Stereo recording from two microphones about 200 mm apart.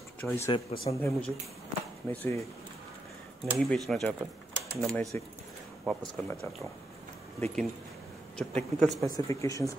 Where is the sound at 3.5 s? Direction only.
Centre (ahead or behind).